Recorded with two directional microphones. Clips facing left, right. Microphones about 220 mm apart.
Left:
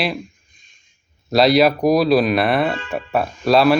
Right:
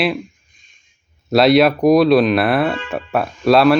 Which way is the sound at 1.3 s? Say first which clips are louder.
Right 2 dB; centre (ahead or behind).